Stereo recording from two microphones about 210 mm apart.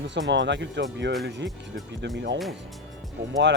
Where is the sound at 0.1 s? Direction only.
60° right (ahead or behind).